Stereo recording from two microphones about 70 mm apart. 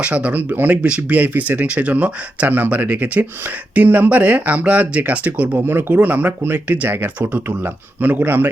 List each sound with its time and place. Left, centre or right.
0.0 s speech: centre